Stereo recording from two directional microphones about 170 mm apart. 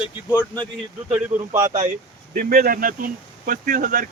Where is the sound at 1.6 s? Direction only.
25° right (ahead or behind).